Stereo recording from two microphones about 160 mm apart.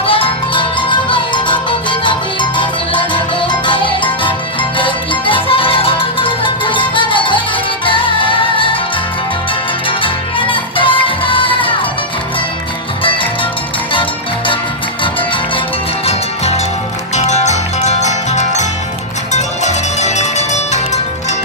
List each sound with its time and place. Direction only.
0.0 s music: 35° left (ahead or behind)
10.0 s music: 35° left (ahead or behind)
17.2 s music: 45° left (ahead or behind)